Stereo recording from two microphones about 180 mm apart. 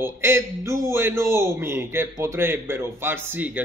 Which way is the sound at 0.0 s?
15° right (ahead or behind).